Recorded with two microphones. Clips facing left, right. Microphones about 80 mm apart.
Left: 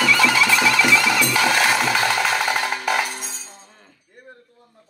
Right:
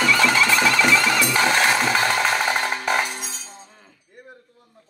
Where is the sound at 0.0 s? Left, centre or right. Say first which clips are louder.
Left 1 dB; right.